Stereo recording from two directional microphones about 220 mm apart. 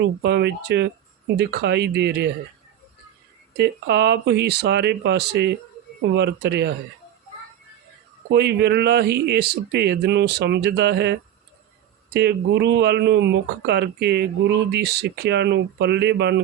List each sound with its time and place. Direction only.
0.0 s speech: 50° right (ahead or behind)
3.6 s speech: 50° right (ahead or behind)
8.3 s speech: 50° right (ahead or behind)